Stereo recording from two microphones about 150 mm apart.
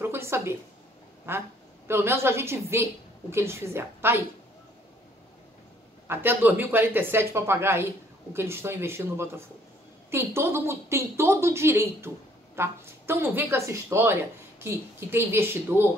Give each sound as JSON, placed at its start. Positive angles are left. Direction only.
{"t": 0.0, "sound": "a woman's voice", "side_deg": -15}
{"t": 6.0, "sound": "a woman's voice", "side_deg": -15}